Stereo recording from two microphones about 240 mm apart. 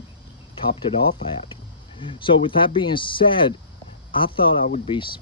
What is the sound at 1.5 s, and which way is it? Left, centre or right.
Speech, left.